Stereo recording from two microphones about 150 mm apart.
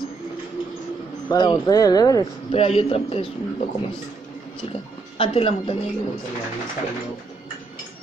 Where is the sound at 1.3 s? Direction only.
30° left (ahead or behind).